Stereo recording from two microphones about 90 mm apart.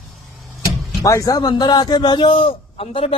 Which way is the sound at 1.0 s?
40° left (ahead or behind).